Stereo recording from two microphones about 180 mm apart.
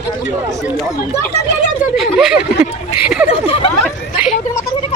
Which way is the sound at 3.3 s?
30° left (ahead or behind).